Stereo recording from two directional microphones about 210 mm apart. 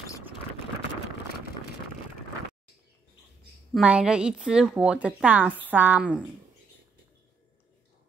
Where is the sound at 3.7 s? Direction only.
5° right (ahead or behind).